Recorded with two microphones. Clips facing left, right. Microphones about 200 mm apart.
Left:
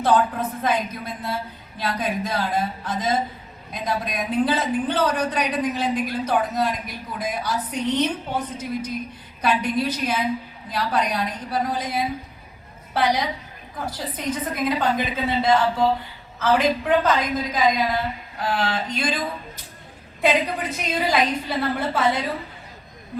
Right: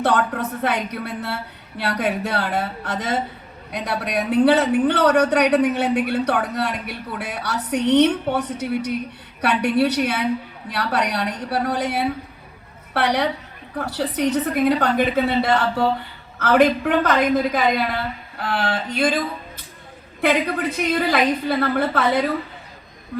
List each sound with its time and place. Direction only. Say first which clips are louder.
0.0 s a man's voice: even; 70° right (ahead or behind); by 19.2 s 55° right (ahead or behind)
20.9 s a woman's voice: right 1 dB; 55° right (ahead or behind)